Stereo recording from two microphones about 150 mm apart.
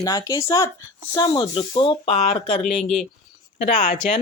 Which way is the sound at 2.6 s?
5° left (ahead or behind).